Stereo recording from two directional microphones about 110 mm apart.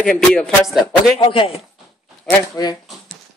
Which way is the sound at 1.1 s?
55° left (ahead or behind).